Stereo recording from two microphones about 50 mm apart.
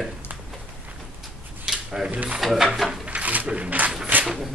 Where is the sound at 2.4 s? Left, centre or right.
Centre.